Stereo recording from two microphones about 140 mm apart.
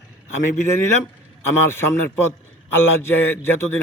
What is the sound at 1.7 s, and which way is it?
A man's voice, 15° left (ahead or behind).